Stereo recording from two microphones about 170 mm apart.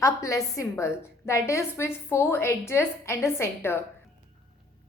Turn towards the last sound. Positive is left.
turn(degrees=15)  # may be behind; listen again after turning